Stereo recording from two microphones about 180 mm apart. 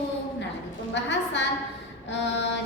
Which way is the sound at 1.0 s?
80° left.